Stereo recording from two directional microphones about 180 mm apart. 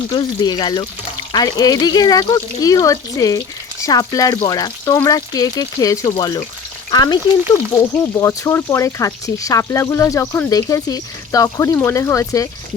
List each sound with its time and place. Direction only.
0.1 s speech: 25° left (ahead or behind)